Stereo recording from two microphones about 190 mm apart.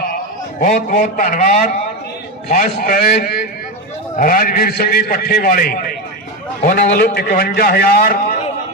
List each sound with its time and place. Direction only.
0.6 s a man's voice: 50° left (ahead or behind)